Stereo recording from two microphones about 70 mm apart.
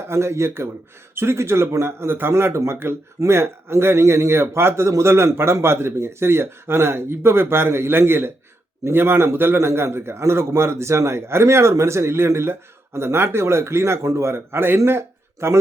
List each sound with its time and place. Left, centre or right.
0.1 s a man's voice: right